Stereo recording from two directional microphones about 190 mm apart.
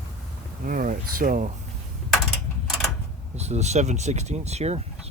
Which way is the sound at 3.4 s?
35° right (ahead or behind).